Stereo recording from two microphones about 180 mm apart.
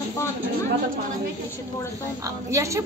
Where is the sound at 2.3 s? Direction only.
15° right (ahead or behind).